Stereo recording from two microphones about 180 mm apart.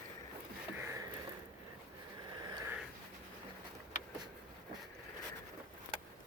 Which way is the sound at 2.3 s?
20° right (ahead or behind).